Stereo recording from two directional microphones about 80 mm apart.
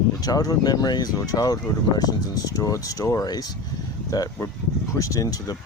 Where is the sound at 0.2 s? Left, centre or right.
Left.